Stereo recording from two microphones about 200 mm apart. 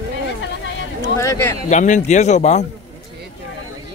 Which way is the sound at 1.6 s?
35° left (ahead or behind).